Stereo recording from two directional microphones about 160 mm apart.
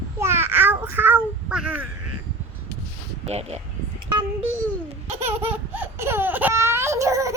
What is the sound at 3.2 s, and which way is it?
Speech, 40° right (ahead or behind).